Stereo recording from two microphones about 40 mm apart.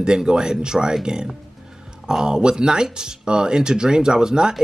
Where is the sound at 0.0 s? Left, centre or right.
Centre.